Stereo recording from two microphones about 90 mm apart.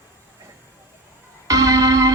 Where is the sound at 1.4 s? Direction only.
40° right (ahead or behind).